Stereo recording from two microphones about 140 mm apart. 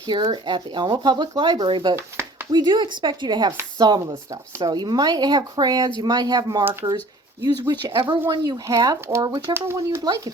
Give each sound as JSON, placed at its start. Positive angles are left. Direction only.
{"t": 0.1, "sound": "speech", "side_deg": -35}